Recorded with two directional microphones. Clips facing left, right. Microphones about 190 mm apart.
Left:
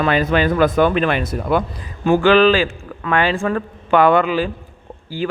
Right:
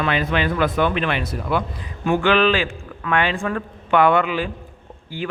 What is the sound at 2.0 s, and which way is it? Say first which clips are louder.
Speech: left 5 dB; 35° left (ahead or behind).